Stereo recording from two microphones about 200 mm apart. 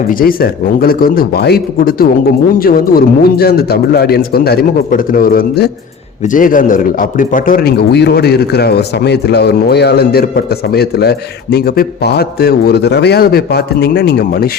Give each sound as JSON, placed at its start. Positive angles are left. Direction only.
{"t": 0.1, "sound": "a man's voice", "side_deg": 45}